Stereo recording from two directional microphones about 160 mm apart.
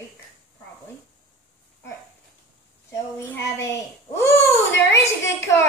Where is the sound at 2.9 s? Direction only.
15° left (ahead or behind).